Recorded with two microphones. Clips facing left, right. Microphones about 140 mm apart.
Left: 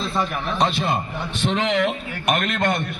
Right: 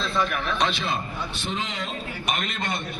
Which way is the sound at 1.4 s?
80° left.